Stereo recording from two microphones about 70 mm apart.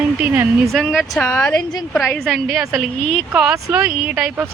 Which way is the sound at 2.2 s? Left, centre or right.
Centre.